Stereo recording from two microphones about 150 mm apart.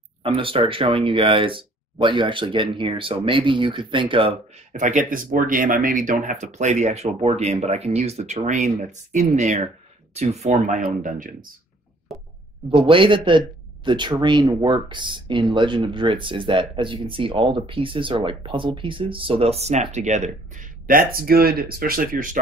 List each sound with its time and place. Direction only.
0.2 s speech: 35° right (ahead or behind)
4.7 s speech: 60° right (ahead or behind)
10.8 s speech: 60° right (ahead or behind)
12.7 s speech: 35° right (ahead or behind); by 22.4 s 65° right (ahead or behind)